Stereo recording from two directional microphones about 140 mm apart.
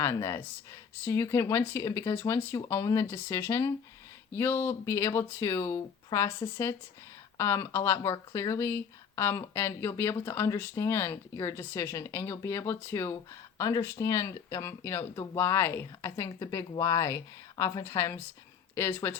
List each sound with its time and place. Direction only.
0.0 s speech: 20° left (ahead or behind)